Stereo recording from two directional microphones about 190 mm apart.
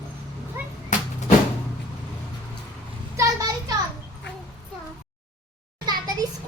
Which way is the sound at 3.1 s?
20° right (ahead or behind).